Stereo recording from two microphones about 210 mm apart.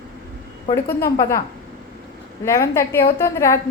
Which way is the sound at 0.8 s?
45° left (ahead or behind).